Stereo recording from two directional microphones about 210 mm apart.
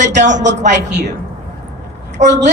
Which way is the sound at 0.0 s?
35° right (ahead or behind).